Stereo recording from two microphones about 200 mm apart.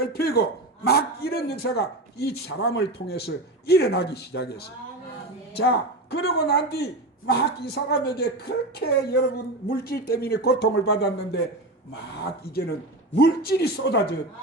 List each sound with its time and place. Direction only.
0.1 s a woman's voice: 50° left (ahead or behind)